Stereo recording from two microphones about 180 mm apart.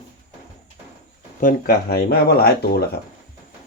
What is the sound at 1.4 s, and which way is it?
Speech, 50° left (ahead or behind).